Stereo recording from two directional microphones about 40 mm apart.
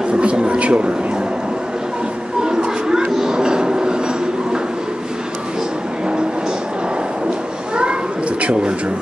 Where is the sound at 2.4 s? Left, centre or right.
Centre.